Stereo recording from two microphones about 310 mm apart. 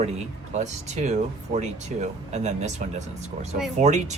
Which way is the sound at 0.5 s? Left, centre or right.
Right.